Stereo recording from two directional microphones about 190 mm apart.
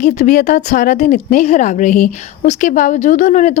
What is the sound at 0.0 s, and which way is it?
Speech, 45° left (ahead or behind).